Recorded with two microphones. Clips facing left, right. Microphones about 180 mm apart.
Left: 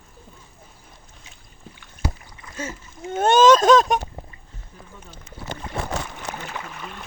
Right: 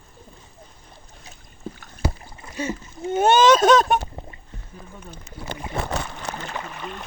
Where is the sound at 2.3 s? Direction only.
25° right (ahead or behind).